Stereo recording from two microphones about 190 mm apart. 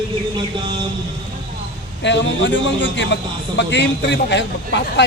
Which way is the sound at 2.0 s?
70° left (ahead or behind).